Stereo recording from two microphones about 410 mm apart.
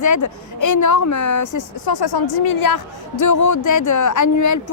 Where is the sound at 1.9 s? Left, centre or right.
Left.